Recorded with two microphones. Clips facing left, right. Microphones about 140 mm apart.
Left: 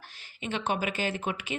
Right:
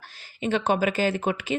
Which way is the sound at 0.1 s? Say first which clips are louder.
Right 9 dB; 40° right (ahead or behind).